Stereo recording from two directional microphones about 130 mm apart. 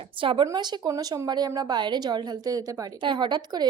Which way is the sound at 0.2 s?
40° right (ahead or behind).